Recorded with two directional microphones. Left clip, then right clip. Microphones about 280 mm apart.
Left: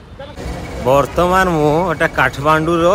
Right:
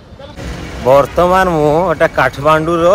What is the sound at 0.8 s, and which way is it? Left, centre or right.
Speech, centre.